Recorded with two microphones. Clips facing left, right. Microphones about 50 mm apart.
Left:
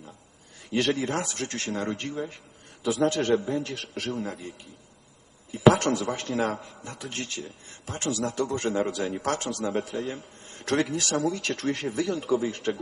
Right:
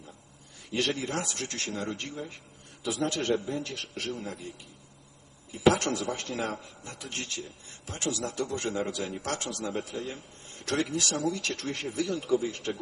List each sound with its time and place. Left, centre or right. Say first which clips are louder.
0.7 s a man's voice: left 4 dB; left